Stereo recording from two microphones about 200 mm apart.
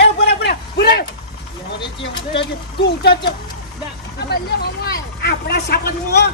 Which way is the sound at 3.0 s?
55° left (ahead or behind).